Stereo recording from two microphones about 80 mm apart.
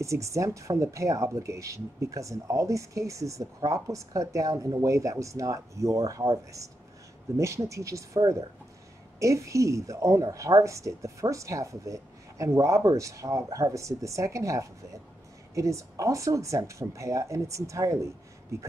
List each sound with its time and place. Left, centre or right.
0.0 s a woman's voice: right